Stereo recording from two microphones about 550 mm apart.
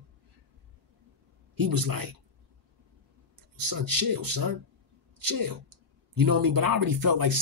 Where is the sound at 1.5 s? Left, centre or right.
Right.